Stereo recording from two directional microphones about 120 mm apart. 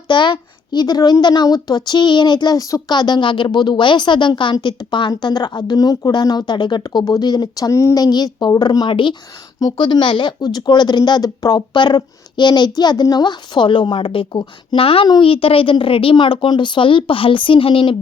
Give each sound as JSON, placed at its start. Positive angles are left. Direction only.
{"t": 0.1, "sound": "a woman's voice", "side_deg": 40}